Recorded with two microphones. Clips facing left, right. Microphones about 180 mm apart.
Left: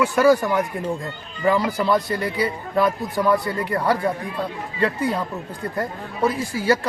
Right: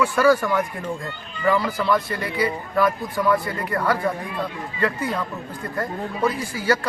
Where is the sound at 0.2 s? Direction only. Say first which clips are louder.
Left 2 dB; 20° left (ahead or behind).